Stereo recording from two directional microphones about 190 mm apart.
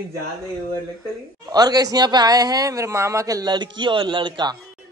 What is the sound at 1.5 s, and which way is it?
A man's voice, 20° right (ahead or behind).